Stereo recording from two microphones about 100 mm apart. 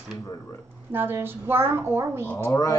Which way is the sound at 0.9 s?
20° right (ahead or behind).